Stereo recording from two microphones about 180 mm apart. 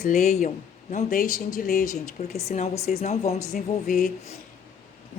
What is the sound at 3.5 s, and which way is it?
Speech, 50° left (ahead or behind).